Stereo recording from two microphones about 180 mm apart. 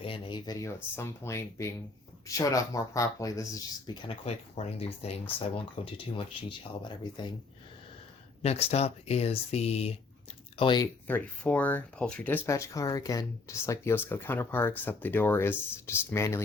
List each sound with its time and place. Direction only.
0.0 s speech: 30° left (ahead or behind)
8.4 s speech: 35° left (ahead or behind)
10.6 s speech: 25° left (ahead or behind)
11.0 s speech: 10° left (ahead or behind)